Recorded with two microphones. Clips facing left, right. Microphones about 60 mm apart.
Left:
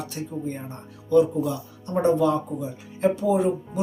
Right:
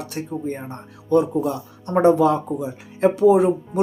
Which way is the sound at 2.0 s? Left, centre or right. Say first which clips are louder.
Right 5 dB; right.